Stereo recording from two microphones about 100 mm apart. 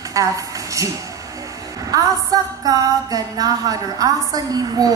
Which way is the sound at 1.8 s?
35° right (ahead or behind).